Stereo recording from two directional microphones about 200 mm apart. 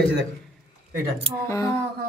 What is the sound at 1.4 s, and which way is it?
Speech, 15° left (ahead or behind).